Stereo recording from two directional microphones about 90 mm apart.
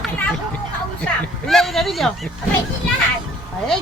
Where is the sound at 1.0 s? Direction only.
Centre (ahead or behind).